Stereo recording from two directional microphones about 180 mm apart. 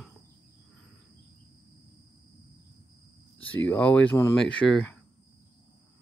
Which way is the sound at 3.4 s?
10° left (ahead or behind).